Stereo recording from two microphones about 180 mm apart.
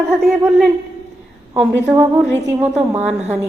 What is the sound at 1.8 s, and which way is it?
A woman's voice, 10° right (ahead or behind).